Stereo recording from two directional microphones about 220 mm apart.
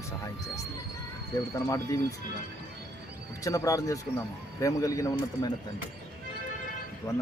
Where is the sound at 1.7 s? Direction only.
15° left (ahead or behind).